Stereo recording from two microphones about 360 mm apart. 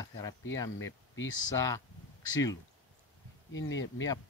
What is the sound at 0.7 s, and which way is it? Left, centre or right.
Speech, left.